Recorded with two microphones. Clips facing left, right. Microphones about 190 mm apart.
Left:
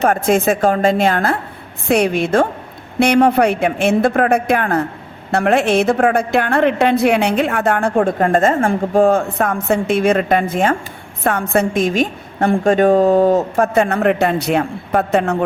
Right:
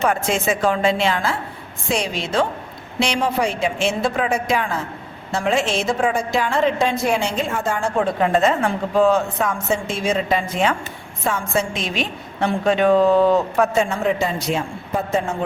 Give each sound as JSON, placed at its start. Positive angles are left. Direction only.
{"t": 0.0, "sound": "a woman's voice", "side_deg": 55}
{"t": 11.2, "sound": "a woman's voice", "side_deg": 60}
{"t": 13.8, "sound": "a woman's voice", "side_deg": 65}